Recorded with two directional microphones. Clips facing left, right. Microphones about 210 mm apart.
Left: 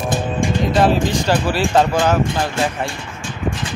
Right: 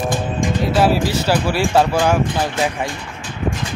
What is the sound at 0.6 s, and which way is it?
Speech, 5° right (ahead or behind).